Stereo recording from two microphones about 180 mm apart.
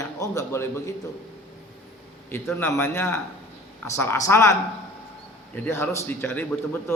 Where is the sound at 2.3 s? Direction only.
10° left (ahead or behind).